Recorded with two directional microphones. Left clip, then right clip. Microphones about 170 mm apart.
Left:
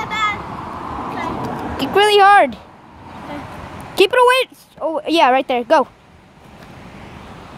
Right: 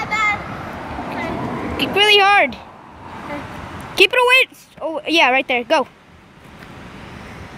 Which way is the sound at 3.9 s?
15° left (ahead or behind).